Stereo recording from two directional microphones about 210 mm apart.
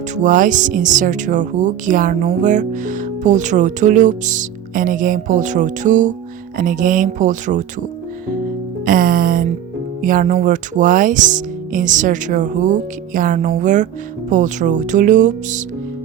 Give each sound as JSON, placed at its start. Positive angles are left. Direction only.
{"t": 0.2, "sound": "speech", "side_deg": -40}
{"t": 8.8, "sound": "music", "side_deg": -40}
{"t": 10.0, "sound": "speech", "side_deg": -40}